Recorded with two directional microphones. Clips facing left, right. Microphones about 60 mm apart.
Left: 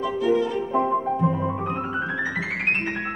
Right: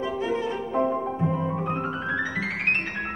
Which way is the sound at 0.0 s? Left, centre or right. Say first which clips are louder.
Left 5 dB; right.